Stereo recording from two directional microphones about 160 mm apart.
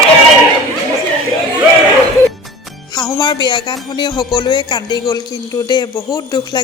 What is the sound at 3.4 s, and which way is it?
A woman's voice, 30° left (ahead or behind).